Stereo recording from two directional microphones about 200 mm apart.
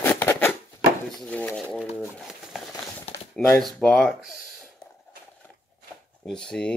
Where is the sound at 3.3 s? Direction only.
5° left (ahead or behind).